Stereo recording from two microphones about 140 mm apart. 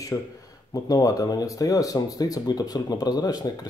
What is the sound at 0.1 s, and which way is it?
Speech, 25° left (ahead or behind).